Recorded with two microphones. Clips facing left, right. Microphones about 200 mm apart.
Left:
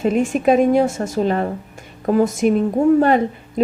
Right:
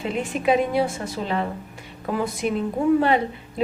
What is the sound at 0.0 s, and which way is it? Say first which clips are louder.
A woman's voice: left 7 dB; 45° left (ahead or behind).